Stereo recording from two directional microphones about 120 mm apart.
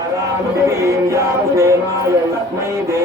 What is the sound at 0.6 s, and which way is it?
Music, 25° right (ahead or behind).